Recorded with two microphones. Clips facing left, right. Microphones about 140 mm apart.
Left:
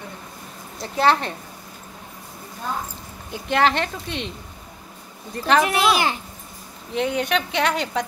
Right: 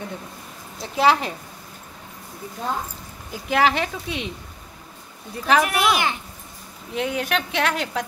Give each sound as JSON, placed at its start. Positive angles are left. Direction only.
{"t": 0.7, "sound": "speech", "side_deg": 0}
{"t": 3.3, "sound": "speech", "side_deg": -5}
{"t": 5.3, "sound": "speech", "side_deg": -5}
{"t": 5.6, "sound": "a child's voice", "side_deg": 25}
{"t": 6.9, "sound": "speech", "side_deg": 0}